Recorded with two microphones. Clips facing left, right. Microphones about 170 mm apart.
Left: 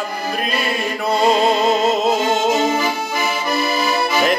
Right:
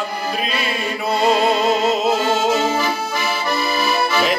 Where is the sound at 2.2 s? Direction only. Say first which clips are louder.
Left 1 dB; 20° left (ahead or behind).